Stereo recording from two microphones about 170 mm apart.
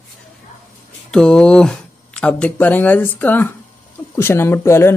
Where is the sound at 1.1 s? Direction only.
5° left (ahead or behind).